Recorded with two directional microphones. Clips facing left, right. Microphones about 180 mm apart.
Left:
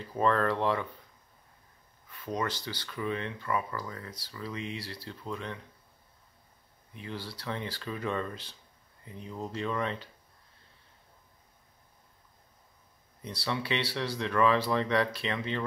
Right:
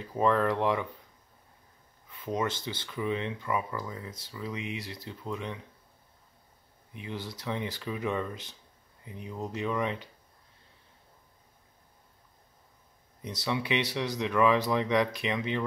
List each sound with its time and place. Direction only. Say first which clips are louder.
0.0 s speech: right 1 dB; 15° right (ahead or behind)
2.0 s speech: right 2 dB; 20° right (ahead or behind)
6.9 s speech: right 2 dB; 15° right (ahead or behind)
13.2 s speech: right 2 dB; 20° right (ahead or behind)